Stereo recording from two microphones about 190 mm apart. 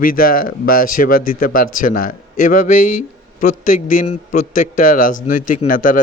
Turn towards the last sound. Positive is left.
turn(degrees=45)  # may be behind; listen again after turning